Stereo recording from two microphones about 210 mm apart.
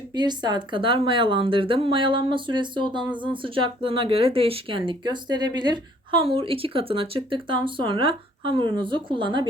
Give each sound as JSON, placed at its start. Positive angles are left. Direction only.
{"t": 0.1, "sound": "speech", "side_deg": -20}